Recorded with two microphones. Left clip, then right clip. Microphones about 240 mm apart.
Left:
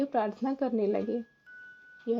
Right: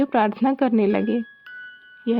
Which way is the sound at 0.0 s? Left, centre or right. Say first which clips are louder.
Right 10 dB; right.